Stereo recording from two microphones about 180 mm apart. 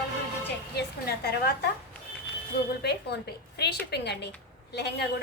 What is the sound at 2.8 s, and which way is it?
A woman's voice, 65° left (ahead or behind).